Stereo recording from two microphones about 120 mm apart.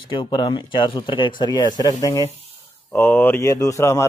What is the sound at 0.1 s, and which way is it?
Speech, 40° left (ahead or behind).